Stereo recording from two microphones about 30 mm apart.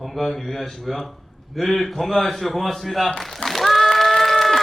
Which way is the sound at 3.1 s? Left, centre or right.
Centre.